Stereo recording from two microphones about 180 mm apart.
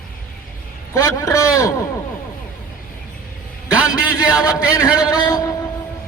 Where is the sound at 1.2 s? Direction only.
20° left (ahead or behind).